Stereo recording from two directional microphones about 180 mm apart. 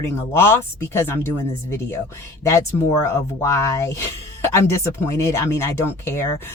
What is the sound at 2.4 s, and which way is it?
Speech, 15° left (ahead or behind).